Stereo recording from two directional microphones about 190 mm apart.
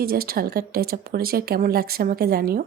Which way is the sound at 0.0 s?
50° right (ahead or behind).